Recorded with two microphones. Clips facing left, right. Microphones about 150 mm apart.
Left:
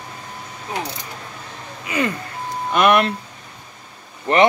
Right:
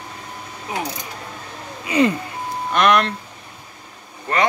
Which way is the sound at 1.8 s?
20° right (ahead or behind).